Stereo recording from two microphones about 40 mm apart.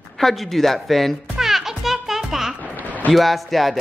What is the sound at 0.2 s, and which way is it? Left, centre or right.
Speech, centre.